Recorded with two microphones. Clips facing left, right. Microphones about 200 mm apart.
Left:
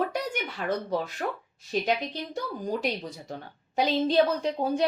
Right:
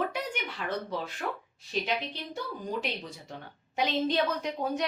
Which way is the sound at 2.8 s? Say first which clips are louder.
Left 6 dB; 40° left (ahead or behind).